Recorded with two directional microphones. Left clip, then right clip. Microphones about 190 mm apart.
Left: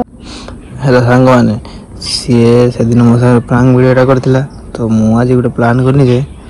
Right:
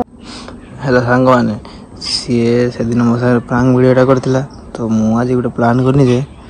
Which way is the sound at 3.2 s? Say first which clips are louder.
Left 4 dB; 5° right (ahead or behind).